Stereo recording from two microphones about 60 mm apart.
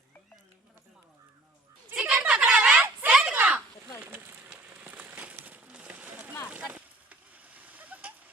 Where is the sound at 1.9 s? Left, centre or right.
Right.